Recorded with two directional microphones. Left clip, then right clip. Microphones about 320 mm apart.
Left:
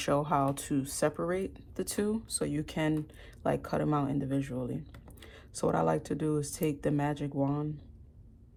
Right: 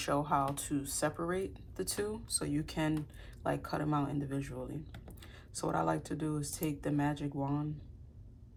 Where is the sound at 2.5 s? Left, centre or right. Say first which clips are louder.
Left 2 dB; left.